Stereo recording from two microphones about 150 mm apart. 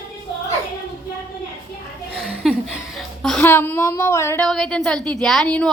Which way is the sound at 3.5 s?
15° left (ahead or behind).